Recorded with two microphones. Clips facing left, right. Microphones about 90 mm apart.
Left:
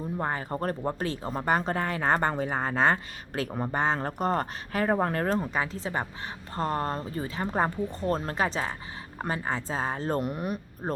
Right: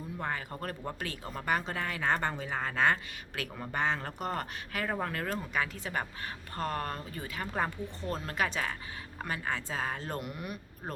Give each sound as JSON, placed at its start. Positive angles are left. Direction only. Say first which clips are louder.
{"t": 0.2, "sound": "speech", "louder": "left 5 dB", "side_deg": 35}